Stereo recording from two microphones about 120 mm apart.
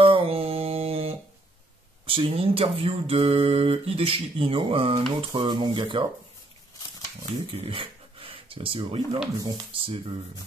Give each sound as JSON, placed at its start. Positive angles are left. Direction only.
{"t": 0.0, "sound": "mantra", "side_deg": -50}
{"t": 2.0, "sound": "a sound", "side_deg": -50}
{"t": 5.3, "sound": "speech", "side_deg": -40}
{"t": 7.5, "sound": "speech", "side_deg": -50}
{"t": 9.4, "sound": "speech", "side_deg": -30}
{"t": 9.7, "sound": "a sound", "side_deg": -45}